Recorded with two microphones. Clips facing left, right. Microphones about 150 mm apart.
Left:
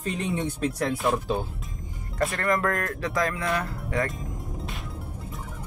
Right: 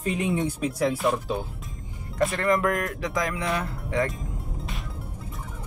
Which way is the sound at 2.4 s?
20° right (ahead or behind).